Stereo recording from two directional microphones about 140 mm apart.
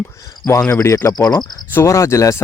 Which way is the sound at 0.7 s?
20° left (ahead or behind).